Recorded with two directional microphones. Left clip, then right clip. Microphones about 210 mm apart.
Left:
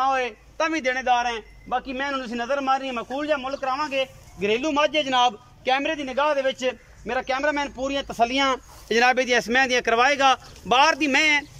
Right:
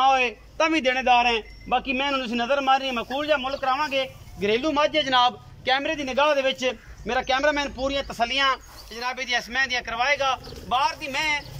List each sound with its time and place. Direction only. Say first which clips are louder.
0.0 s a man's voice: right 3 dB; centre (ahead or behind); by 8.5 s 20° left (ahead or behind)
8.8 s speech: left 11 dB; 50° left (ahead or behind)